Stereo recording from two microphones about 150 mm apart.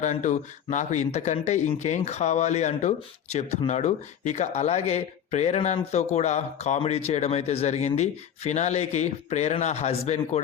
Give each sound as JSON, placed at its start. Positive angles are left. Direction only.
{"t": 0.0, "sound": "speech", "side_deg": 55}